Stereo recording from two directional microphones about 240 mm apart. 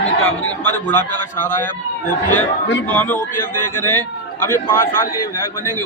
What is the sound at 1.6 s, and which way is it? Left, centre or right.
A man's voice, centre.